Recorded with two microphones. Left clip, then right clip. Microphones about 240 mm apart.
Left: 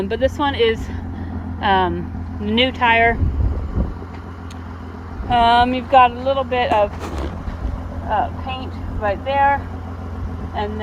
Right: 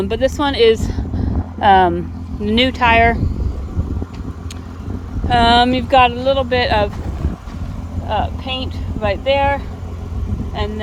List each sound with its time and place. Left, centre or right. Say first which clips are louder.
0.0 s speech: right 2 dB; centre
5.3 s speech: right 2 dB; right
8.1 s speech: right 1 dB; right